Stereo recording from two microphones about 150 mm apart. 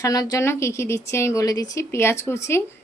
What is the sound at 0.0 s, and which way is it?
Speech, 25° left (ahead or behind).